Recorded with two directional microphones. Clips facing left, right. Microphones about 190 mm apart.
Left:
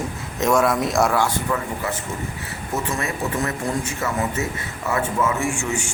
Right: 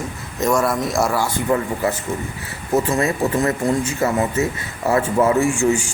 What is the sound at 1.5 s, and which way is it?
Speech, 30° right (ahead or behind).